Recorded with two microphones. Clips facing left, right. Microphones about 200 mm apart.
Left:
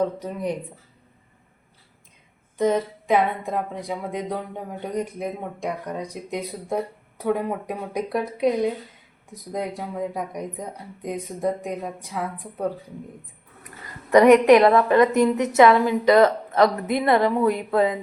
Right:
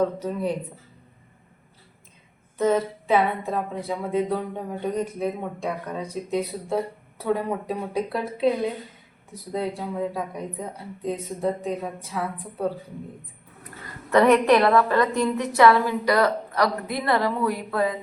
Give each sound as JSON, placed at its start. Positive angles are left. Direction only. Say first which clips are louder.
{"t": 0.2, "sound": "speech", "louder": "right 1 dB", "side_deg": 15}
{"t": 2.6, "sound": "speech", "louder": "even", "side_deg": 15}
{"t": 14.1, "sound": "a woman's voice", "louder": "left 4 dB", "side_deg": 15}